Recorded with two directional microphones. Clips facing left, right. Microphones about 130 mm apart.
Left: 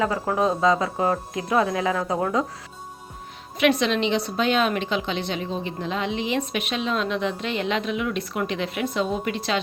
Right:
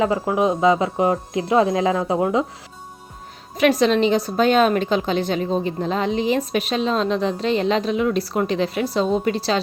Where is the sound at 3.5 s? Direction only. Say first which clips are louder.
Right 4 dB; 40° right (ahead or behind).